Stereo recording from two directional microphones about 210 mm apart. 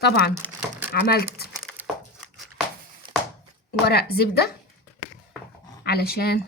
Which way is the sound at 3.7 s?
50° left (ahead or behind).